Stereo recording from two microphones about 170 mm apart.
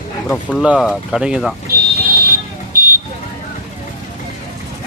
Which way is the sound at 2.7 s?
55° right (ahead or behind).